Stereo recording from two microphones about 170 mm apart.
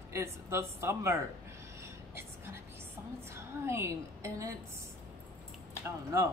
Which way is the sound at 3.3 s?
15° right (ahead or behind).